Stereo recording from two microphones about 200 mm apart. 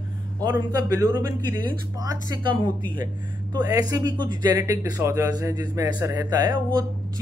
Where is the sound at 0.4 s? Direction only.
20° right (ahead or behind).